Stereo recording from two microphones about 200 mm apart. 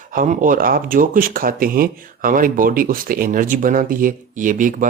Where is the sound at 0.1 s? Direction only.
40° right (ahead or behind).